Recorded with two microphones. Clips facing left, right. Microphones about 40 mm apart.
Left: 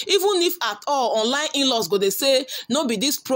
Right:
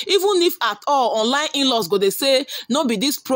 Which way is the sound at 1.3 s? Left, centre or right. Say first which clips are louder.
Right 3 dB; centre.